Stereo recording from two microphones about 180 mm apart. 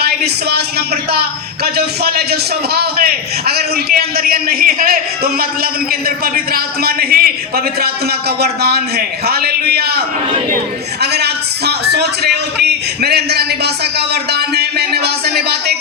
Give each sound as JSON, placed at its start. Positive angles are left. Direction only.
{"t": 0.0, "sound": "a man's voice", "side_deg": -60}
{"t": 11.0, "sound": "a sound", "side_deg": -65}
{"t": 13.0, "sound": "a man's voice", "side_deg": -60}
{"t": 14.1, "sound": "music", "side_deg": -65}